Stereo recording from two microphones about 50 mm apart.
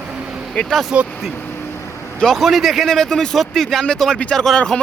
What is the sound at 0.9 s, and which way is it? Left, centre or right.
Speech, right.